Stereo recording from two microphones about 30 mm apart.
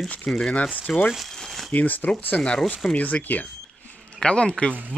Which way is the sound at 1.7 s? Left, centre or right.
Left.